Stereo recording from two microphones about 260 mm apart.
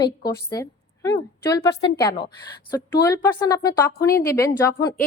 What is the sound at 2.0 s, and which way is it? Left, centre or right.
A woman's voice, centre.